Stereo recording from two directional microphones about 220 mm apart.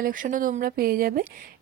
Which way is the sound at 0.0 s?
35° right (ahead or behind).